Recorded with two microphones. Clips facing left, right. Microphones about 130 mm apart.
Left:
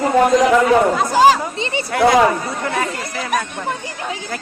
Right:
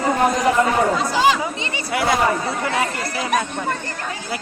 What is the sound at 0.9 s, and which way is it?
Speech, 45° left (ahead or behind).